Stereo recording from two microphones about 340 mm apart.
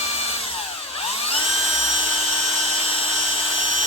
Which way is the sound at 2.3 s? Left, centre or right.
Centre.